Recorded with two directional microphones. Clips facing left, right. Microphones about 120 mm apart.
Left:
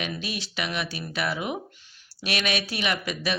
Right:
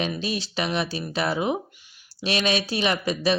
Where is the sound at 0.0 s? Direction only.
30° right (ahead or behind).